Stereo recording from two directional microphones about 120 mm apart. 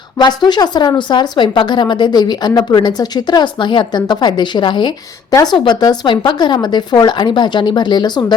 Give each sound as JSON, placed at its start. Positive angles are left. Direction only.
{"t": 0.2, "sound": "a woman's voice", "side_deg": 35}